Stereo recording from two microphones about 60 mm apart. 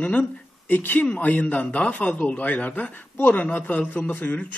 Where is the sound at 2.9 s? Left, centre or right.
Left.